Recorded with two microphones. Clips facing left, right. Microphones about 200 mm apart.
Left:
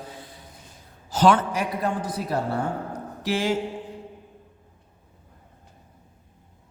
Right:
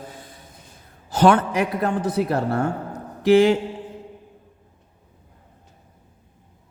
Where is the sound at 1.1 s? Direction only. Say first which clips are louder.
Right 3 dB; 60° right (ahead or behind).